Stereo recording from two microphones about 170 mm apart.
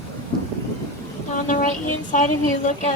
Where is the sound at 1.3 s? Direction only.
50° left (ahead or behind).